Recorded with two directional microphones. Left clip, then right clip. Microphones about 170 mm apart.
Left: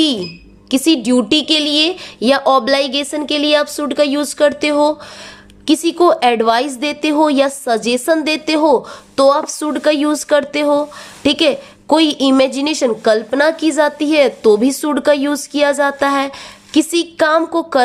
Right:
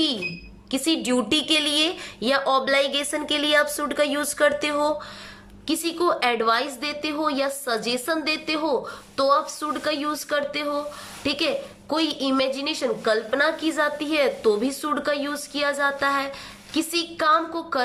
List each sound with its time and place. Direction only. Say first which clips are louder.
0.7 s a woman's voice: left 9 dB; 35° left (ahead or behind)
5.6 s a woman's voice: left 11 dB; 40° left (ahead or behind)